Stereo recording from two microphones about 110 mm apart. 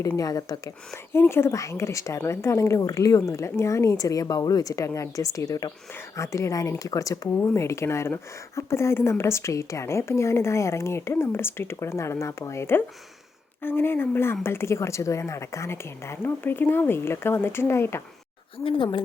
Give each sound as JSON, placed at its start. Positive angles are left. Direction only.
{"t": 0.2, "sound": "speech", "side_deg": 35}
{"t": 1.1, "sound": "speech", "side_deg": 20}
{"t": 18.5, "sound": "speech", "side_deg": 55}